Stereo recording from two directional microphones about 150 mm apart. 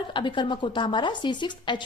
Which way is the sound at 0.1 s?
30° left (ahead or behind).